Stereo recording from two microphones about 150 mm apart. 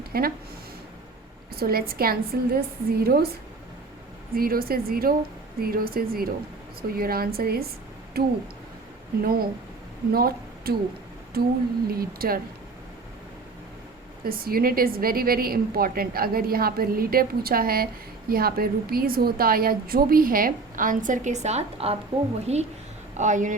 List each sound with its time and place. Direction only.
0.1 s speech: 85° right
1.5 s a woman's voice: 90° right
4.4 s a woman's voice: 80° right
14.3 s a woman's voice: 80° right; by 23.6 s 55° right (ahead or behind)